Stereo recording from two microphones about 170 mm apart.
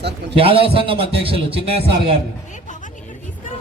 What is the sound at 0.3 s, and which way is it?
A man's voice, 35° right (ahead or behind).